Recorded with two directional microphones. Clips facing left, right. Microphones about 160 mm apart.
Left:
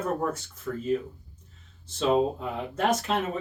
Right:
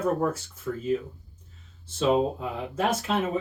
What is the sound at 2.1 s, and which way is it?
Speech, 5° right (ahead or behind).